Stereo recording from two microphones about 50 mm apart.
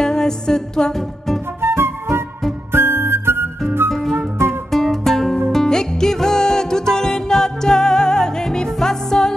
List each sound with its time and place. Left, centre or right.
0.0 s music: centre
1.6 s flute: right
2.7 s music: right
4.5 s music: centre